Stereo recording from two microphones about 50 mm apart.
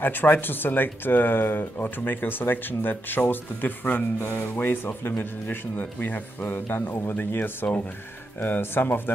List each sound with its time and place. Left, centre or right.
0.0 s speech: left